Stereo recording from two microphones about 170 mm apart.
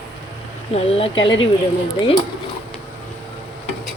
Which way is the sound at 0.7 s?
35° left (ahead or behind).